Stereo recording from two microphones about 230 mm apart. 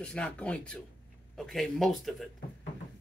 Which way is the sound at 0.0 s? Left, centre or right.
Centre.